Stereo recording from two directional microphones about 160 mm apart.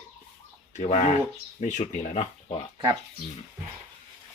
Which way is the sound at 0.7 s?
45° left (ahead or behind).